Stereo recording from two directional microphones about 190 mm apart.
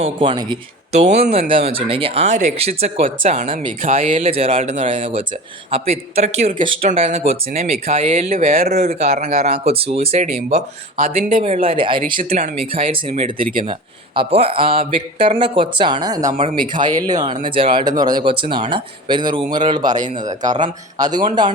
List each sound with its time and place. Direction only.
0.0 s speech: 25° right (ahead or behind)
0.9 s speech: 35° right (ahead or behind)
4.1 s speech: 30° right (ahead or behind)
11.0 s speech: 45° right (ahead or behind); by 12.1 s 25° right (ahead or behind)
12.1 s speech: 45° right (ahead or behind)
12.9 s speech: 30° right (ahead or behind)
20.0 s speech: 40° right (ahead or behind)
21.0 s speech: 20° right (ahead or behind)